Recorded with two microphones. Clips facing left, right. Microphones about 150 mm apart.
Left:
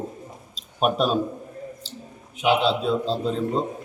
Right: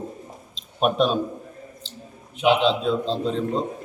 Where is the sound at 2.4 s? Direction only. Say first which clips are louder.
Right 1 dB; 10° left (ahead or behind).